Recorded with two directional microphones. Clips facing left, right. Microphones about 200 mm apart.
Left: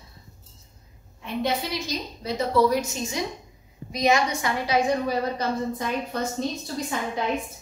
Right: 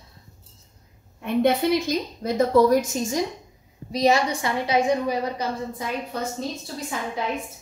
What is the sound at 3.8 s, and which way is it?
A woman's voice, 35° right (ahead or behind).